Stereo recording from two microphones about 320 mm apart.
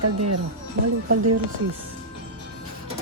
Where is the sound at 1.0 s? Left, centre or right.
Right.